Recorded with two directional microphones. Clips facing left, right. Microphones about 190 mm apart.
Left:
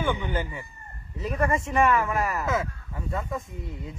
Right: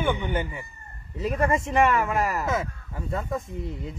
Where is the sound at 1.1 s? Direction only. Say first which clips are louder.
Right 2 dB; 30° right (ahead or behind).